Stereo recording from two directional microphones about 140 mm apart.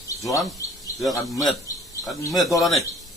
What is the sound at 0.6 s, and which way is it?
Speech, 20° left (ahead or behind).